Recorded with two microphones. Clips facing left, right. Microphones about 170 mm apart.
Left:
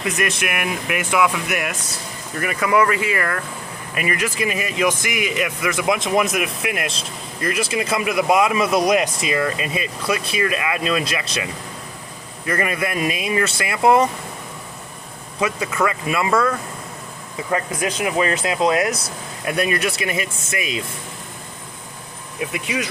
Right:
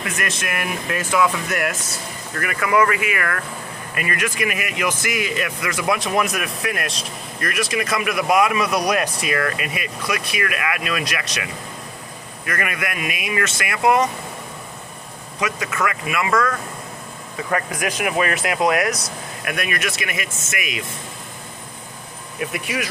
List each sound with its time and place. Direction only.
0.4 s speech: 15° left (ahead or behind)
12.5 s speech: 30° left (ahead or behind)
15.4 s speech: 30° left (ahead or behind)
16.3 s speech: 10° left (ahead or behind)
17.3 s speech: 20° left (ahead or behind)